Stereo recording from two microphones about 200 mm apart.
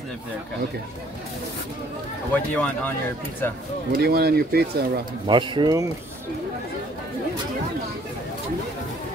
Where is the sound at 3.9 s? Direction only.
50° right (ahead or behind).